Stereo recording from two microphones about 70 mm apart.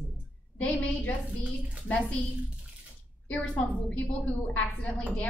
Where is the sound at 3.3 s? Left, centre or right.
Left.